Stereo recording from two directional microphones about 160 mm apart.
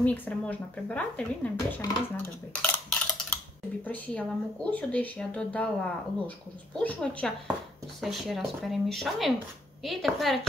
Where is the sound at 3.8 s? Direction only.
10° left (ahead or behind).